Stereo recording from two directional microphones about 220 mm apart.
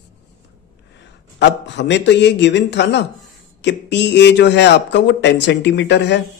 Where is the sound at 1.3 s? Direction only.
55° left (ahead or behind).